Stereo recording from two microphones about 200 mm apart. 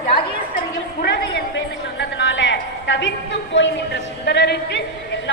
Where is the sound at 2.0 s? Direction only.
65° left (ahead or behind).